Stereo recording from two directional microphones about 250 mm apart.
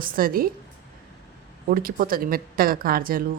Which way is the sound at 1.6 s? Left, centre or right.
Right.